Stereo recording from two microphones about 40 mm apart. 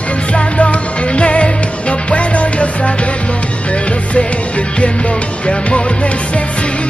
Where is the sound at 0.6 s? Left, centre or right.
Left.